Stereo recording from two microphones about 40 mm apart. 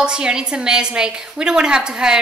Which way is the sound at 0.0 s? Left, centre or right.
Right.